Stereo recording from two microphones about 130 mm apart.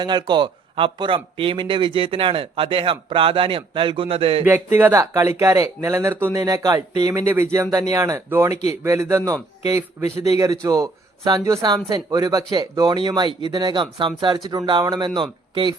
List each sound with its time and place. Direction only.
0.0 s speech: 35° right (ahead or behind)
4.4 s a man's voice: 15° right (ahead or behind); by 15.7 s 35° right (ahead or behind)